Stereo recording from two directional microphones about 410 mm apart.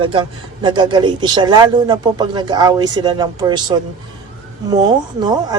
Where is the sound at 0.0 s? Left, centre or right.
Centre.